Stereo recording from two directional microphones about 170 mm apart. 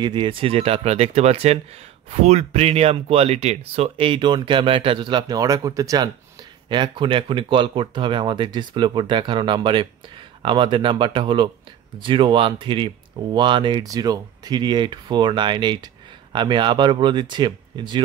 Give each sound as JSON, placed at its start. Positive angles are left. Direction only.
{"t": 0.0, "sound": "speech", "side_deg": -30}